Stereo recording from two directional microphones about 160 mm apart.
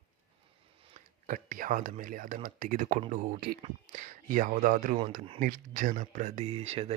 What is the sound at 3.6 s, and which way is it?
Speech, 50° right (ahead or behind).